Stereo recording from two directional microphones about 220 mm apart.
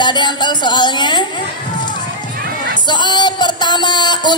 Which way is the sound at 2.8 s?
20° left (ahead or behind).